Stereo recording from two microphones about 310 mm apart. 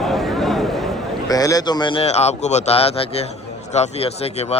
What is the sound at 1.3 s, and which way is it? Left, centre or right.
A man's voice, centre.